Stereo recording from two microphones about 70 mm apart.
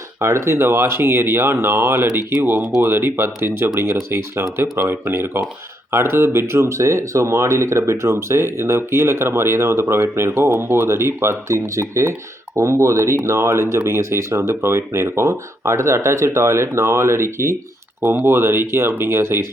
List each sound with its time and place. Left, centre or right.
0.2 s speech: right